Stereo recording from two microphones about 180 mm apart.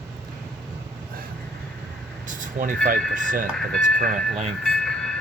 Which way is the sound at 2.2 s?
45° right (ahead or behind).